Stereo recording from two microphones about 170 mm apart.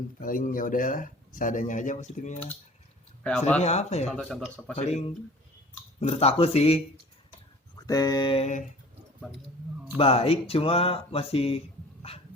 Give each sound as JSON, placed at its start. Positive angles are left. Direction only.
{"t": 0.2, "sound": "speech", "side_deg": 55}
{"t": 3.6, "sound": "speech", "side_deg": 40}
{"t": 4.0, "sound": "speech", "side_deg": 0}
{"t": 4.8, "sound": "speech", "side_deg": 40}
{"t": 7.9, "sound": "a sound", "side_deg": 20}
{"t": 8.4, "sound": "speech", "side_deg": 45}
{"t": 10.0, "sound": "speech", "side_deg": 35}
{"t": 12.1, "sound": "dog", "side_deg": 35}